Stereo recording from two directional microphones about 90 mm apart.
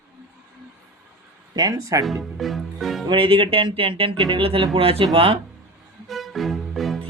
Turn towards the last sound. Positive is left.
turn(degrees=0)  # may be behind; listen again after turning